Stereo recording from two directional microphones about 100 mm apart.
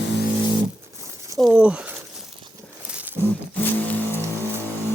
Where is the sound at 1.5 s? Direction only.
10° right (ahead or behind).